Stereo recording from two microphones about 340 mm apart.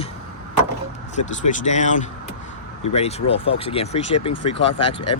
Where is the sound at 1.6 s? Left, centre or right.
Left.